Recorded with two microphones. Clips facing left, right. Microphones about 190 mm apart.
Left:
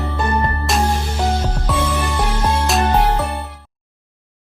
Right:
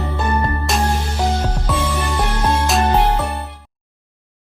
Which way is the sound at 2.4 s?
5° left (ahead or behind).